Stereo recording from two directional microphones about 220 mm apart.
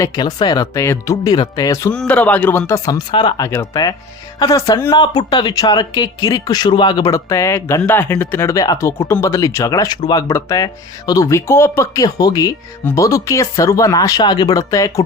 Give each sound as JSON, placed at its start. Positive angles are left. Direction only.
{"t": 0.0, "sound": "speech", "side_deg": 20}